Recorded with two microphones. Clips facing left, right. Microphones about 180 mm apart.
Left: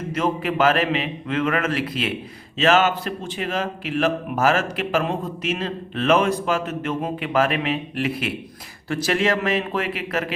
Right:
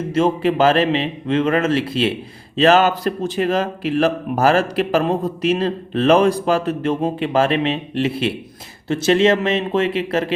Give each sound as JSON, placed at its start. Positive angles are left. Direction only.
{"t": 0.1, "sound": "a man's voice", "side_deg": -30}